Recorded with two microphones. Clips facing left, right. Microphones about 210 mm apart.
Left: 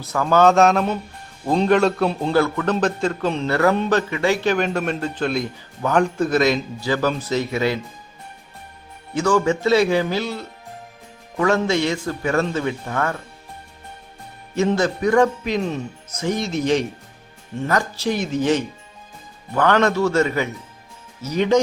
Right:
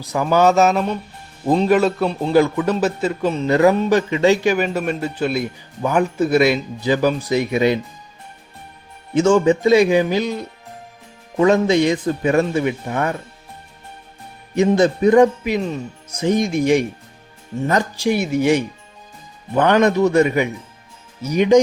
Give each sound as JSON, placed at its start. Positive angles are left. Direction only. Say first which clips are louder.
{"t": 0.0, "sound": "a man's voice", "louder": "even", "side_deg": -15}
{"t": 2.3, "sound": "a man's voice", "louder": "right 7 dB", "side_deg": -15}
{"t": 4.4, "sound": "a man's voice", "louder": "right 2 dB", "side_deg": -5}
{"t": 9.1, "sound": "a man's voice", "louder": "right 5 dB", "side_deg": -20}
{"t": 14.5, "sound": "a man's voice", "louder": "right 4 dB", "side_deg": -15}
{"t": 15.4, "sound": "a man's voice", "louder": "right 1 dB", "side_deg": -5}
{"t": 16.2, "sound": "a man's voice", "louder": "right 5 dB", "side_deg": -15}